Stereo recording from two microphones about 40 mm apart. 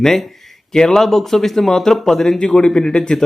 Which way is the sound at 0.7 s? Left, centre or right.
Centre.